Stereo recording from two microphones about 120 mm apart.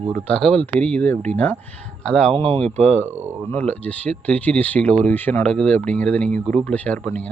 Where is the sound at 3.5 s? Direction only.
15° left (ahead or behind).